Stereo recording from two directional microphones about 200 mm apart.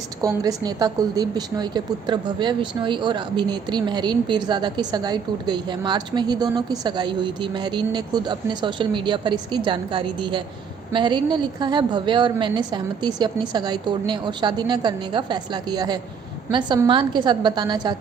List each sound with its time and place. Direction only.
0.2 s a woman's voice: 20° right (ahead or behind)